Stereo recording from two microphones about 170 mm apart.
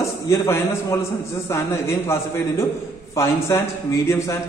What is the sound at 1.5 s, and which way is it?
Speech, 15° left (ahead or behind).